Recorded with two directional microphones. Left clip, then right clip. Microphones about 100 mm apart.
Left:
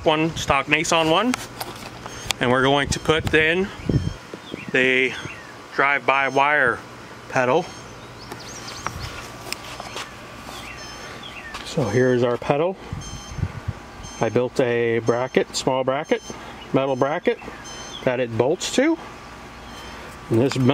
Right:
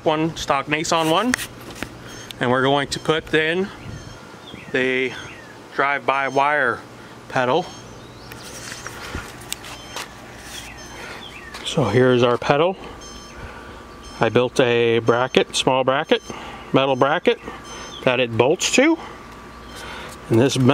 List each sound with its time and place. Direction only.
0.0 s speech: 5° right (ahead or behind)
2.3 s speech: 10° right (ahead or behind)
4.7 s speech: 10° right (ahead or behind)
11.7 s speech: 25° right (ahead or behind)
14.2 s speech: 25° right (ahead or behind)